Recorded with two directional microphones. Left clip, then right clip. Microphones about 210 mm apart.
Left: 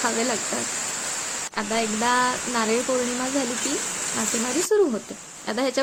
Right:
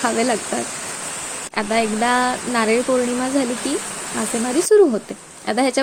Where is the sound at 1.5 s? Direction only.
30° right (ahead or behind).